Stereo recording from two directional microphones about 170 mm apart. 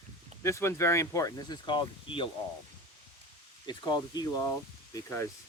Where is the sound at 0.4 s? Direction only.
15° left (ahead or behind).